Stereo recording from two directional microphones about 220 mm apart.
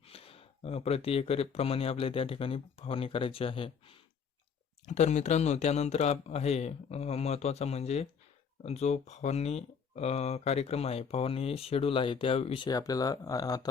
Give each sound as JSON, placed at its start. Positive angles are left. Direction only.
{"t": 0.0, "sound": "speech", "side_deg": 25}